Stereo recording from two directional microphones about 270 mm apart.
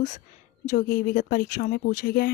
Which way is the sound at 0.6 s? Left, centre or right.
Left.